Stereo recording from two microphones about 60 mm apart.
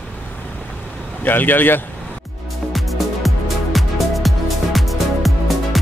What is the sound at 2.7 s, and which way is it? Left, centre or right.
Music, centre.